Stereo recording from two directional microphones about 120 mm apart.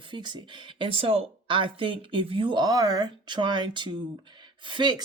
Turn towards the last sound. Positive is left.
turn(degrees=-40)  # may be behind; listen again after turning